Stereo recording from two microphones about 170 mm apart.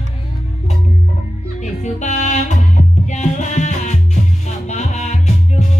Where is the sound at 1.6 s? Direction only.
45° left (ahead or behind).